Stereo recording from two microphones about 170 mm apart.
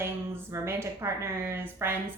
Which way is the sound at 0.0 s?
15° right (ahead or behind).